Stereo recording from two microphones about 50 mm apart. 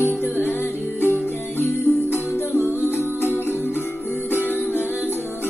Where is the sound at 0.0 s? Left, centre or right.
Left.